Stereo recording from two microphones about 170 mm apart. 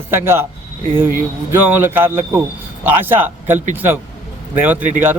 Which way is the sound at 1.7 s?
10° right (ahead or behind).